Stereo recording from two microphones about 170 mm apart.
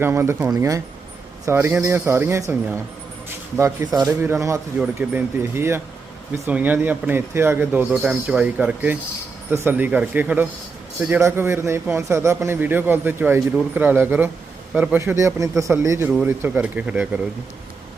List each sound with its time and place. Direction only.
0.0 s a man's voice: 15° right (ahead or behind)